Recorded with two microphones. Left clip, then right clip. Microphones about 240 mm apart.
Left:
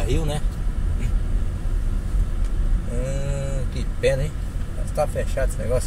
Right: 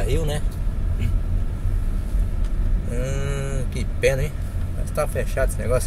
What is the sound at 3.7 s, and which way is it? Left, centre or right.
Speech, right.